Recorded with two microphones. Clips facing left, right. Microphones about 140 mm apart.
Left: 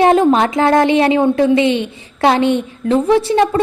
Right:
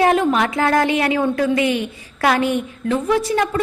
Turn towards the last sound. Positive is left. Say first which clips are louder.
# left 6 dB
turn(degrees=30)  # may be behind; listen again after turning